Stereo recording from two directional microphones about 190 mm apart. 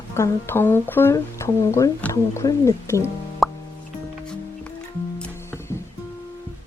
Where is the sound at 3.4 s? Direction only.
Centre (ahead or behind).